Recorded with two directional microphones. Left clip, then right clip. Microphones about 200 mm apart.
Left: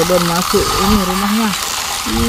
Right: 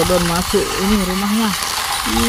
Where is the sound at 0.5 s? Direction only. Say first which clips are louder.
Left 4 dB; 20° left (ahead or behind).